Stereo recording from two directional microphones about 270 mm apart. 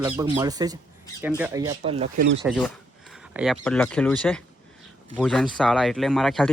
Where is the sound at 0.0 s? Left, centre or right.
Centre.